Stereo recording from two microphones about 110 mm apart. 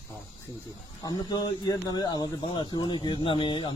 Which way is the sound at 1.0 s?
35° left (ahead or behind).